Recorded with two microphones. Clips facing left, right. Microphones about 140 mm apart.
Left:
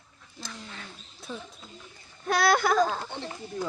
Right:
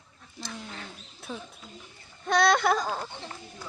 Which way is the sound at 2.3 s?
5° left (ahead or behind).